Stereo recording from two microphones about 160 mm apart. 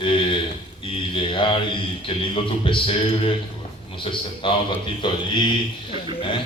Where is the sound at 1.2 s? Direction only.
30° left (ahead or behind).